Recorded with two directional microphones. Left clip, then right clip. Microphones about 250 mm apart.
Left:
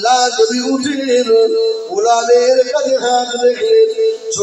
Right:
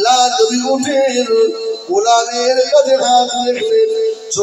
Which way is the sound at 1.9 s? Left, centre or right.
Right.